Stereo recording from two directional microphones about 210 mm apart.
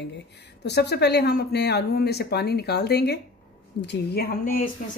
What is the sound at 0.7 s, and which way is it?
Speech, 50° left (ahead or behind).